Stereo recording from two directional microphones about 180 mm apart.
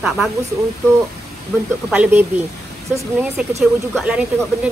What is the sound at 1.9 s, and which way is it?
Speech, 10° right (ahead or behind).